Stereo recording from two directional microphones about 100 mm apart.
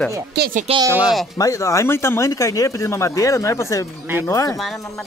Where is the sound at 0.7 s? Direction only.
70° right (ahead or behind).